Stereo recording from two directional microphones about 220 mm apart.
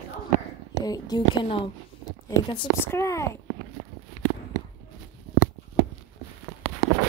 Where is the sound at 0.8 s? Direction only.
15° left (ahead or behind).